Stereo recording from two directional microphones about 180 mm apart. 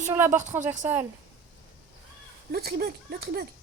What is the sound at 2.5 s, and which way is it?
Speech, 60° right (ahead or behind).